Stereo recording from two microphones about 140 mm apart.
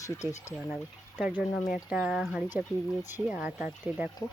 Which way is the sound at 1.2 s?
10° right (ahead or behind).